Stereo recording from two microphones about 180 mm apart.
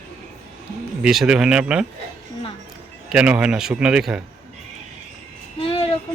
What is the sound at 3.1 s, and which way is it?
Speech, 5° right (ahead or behind).